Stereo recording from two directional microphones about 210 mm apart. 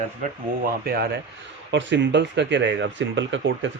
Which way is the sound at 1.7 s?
60° right (ahead or behind).